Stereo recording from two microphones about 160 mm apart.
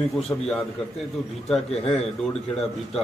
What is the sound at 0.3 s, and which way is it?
Speech, 15° left (ahead or behind).